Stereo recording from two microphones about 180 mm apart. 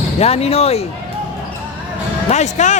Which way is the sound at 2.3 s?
40° left (ahead or behind).